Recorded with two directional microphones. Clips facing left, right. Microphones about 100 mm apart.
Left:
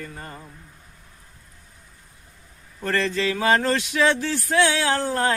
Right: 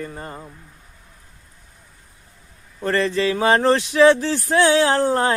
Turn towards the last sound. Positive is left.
turn(degrees=-30)  # may be behind; listen again after turning